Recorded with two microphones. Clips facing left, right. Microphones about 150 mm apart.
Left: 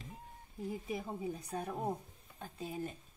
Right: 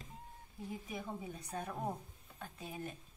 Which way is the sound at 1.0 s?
30° left (ahead or behind).